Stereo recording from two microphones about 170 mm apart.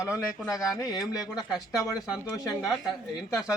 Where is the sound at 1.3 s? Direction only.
5° right (ahead or behind).